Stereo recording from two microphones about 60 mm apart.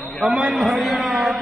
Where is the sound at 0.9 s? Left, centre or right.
Centre.